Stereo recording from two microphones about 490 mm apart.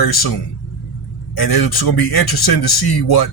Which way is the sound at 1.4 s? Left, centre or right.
Left.